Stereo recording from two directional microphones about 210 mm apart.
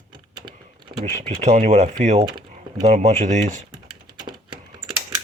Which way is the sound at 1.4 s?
35° right (ahead or behind).